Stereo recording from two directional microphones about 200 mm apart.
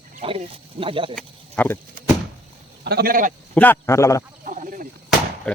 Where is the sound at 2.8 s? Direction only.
50° right (ahead or behind).